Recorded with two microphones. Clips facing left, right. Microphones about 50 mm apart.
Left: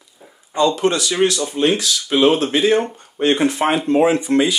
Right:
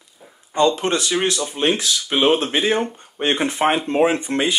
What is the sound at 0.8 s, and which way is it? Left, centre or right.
Speech, right.